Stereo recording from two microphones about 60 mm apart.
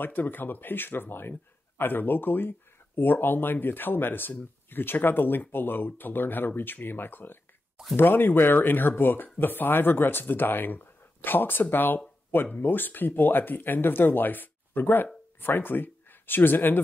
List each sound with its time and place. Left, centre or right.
0.0 s speech: left